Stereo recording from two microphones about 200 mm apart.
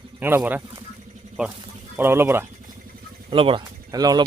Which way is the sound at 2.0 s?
10° right (ahead or behind).